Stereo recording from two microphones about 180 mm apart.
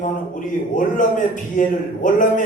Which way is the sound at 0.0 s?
45° left (ahead or behind).